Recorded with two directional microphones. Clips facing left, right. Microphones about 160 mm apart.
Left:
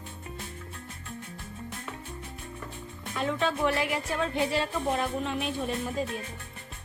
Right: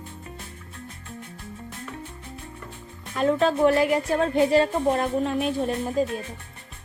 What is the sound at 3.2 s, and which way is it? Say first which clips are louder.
A woman's voice: right 8 dB; 40° right (ahead or behind).